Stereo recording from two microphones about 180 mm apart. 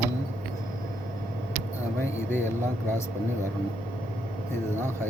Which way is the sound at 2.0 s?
15° left (ahead or behind).